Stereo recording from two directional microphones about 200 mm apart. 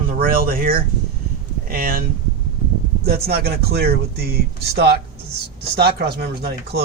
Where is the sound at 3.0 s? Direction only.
50° right (ahead or behind).